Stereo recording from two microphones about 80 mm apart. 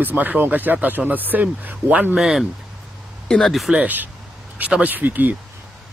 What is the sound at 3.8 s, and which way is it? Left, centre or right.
Speech, right.